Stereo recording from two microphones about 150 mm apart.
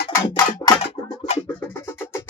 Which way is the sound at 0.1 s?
20° left (ahead or behind).